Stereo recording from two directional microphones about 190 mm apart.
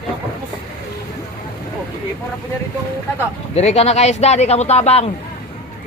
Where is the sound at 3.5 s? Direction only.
35° left (ahead or behind).